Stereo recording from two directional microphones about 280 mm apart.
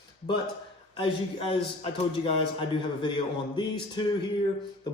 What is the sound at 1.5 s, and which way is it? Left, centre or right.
A man's voice, left.